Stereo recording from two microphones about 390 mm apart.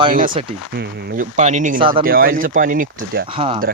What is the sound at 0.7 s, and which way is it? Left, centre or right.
Speech, right.